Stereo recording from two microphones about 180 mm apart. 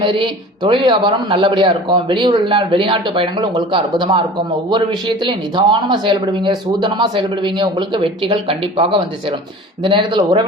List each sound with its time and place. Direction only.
0.0 s speech: 30° right (ahead or behind)